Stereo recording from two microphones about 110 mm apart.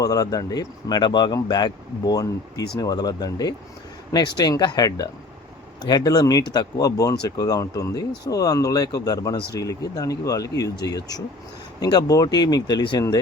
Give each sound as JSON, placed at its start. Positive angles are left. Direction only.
{"t": 0.0, "sound": "speech", "side_deg": 35}